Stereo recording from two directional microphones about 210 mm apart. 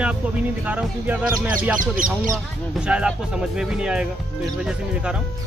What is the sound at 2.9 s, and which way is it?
Speech, 5° right (ahead or behind).